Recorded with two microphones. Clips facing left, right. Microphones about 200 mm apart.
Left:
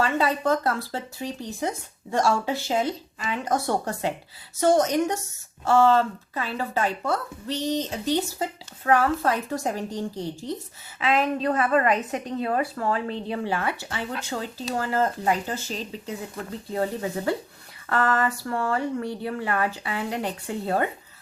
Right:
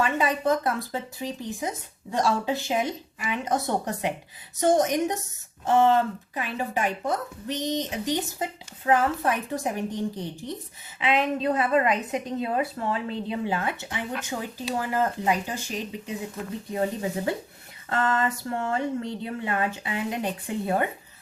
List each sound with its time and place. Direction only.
0.0 s a woman's voice: 15° right (ahead or behind)
2.1 s a woman's voice: 15° right (ahead or behind)
11.4 s a woman's voice: 45° left (ahead or behind)
13.6 s a woman's voice: 20° right (ahead or behind)